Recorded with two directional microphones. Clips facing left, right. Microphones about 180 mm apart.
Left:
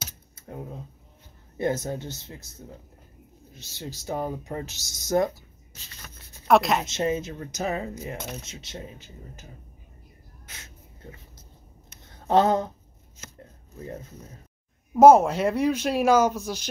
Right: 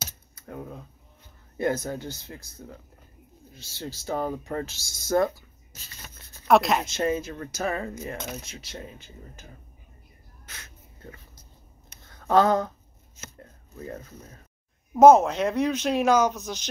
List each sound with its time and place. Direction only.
1.6 s speech: 20° left (ahead or behind)
3.5 s speech: 20° left (ahead or behind)
6.4 s speech: centre (ahead or behind)
6.9 s speech: 20° left (ahead or behind)
10.5 s a sound: 20° left (ahead or behind)
13.7 s speech: 20° left (ahead or behind)
15.0 s speech: 5° left (ahead or behind)